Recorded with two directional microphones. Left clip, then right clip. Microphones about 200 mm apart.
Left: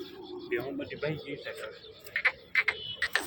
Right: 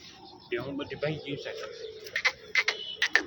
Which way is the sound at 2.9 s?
45° right (ahead or behind).